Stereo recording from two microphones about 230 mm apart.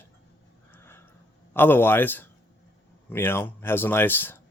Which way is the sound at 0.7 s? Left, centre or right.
Centre.